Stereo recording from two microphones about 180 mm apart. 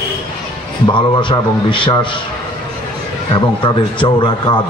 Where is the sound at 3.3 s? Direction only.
25° left (ahead or behind).